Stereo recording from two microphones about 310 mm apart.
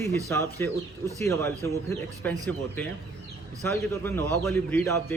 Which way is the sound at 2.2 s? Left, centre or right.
Centre.